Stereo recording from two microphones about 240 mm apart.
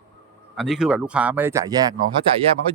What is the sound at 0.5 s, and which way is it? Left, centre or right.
Speech, centre.